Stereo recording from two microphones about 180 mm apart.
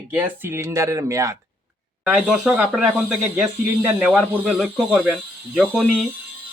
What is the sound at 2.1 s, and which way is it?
Speech, 5° right (ahead or behind).